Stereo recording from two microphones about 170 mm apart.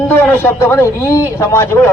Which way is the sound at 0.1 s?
10° left (ahead or behind).